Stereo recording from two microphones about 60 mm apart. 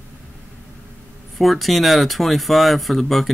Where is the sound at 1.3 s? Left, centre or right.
Centre.